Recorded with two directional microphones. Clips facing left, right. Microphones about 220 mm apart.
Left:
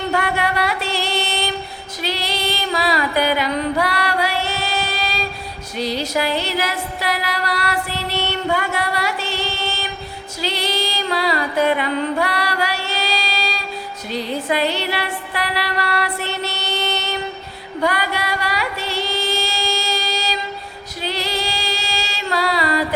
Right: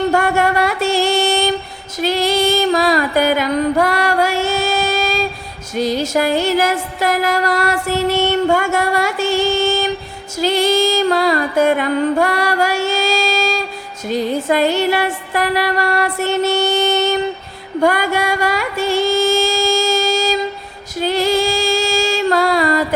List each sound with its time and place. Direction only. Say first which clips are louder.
0.1 s music: right 6 dB; 45° right (ahead or behind)